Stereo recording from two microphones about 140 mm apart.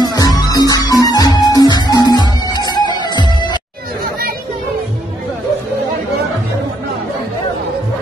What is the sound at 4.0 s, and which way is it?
Chatter, 90° right.